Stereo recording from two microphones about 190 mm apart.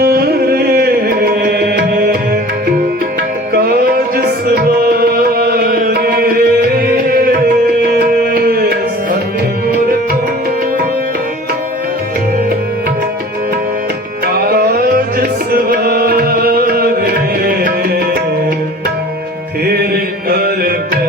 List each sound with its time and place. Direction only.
0.0 s music: 55° right (ahead or behind)
3.5 s music: 50° right (ahead or behind)
14.5 s tabla: 55° right (ahead or behind)
17.4 s music: 50° right (ahead or behind)
19.7 s music: 55° right (ahead or behind)